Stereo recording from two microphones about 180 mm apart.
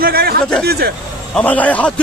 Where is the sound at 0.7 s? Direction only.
60° right (ahead or behind).